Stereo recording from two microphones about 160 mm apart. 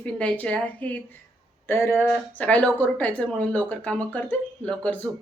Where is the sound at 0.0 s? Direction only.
10° left (ahead or behind).